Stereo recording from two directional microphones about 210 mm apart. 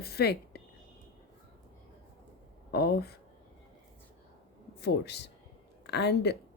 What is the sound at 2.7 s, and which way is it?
Speech, 50° left (ahead or behind).